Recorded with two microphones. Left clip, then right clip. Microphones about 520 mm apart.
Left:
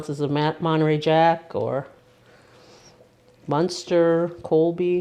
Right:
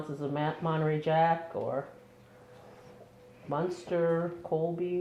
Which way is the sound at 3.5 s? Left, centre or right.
Left.